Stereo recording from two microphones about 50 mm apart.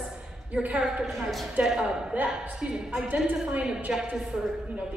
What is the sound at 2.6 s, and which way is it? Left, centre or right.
A woman's voice, centre.